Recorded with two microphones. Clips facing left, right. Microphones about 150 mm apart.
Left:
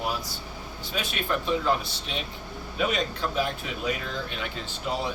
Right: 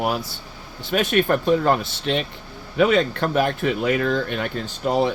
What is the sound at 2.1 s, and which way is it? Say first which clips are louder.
Speech: right 12 dB; 70° right (ahead or behind).